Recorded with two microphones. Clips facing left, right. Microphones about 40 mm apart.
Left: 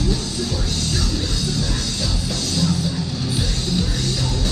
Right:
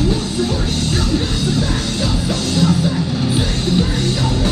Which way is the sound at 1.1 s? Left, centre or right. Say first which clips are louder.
Right 6 dB; right.